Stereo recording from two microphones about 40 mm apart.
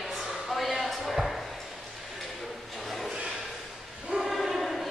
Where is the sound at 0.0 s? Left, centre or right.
Centre.